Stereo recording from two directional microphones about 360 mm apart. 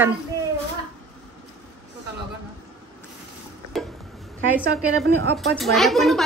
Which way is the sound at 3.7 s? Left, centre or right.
Centre.